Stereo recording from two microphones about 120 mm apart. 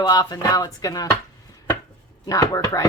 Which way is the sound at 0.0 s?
35° left (ahead or behind).